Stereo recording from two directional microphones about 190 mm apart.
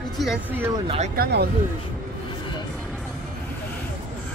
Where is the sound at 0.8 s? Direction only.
35° right (ahead or behind).